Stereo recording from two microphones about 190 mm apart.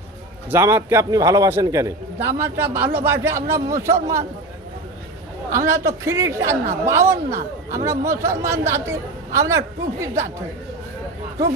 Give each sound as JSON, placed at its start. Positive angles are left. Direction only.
{"t": 0.5, "sound": "a man's voice", "side_deg": -10}
{"t": 5.7, "sound": "a man's voice", "side_deg": -15}